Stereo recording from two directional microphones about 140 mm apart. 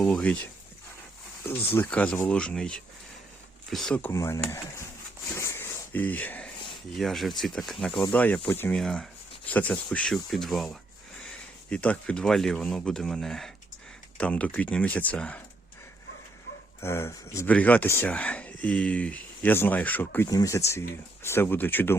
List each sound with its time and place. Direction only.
0.0 s speech: 5° left (ahead or behind)
1.5 s speech: 15° left (ahead or behind)
4.1 s speech: 20° left (ahead or behind)
5.3 s a sound: 20° left (ahead or behind)
6.9 s speech: centre (ahead or behind)
8.7 s speech: 5° left (ahead or behind)
16.8 s speech: 20° left (ahead or behind)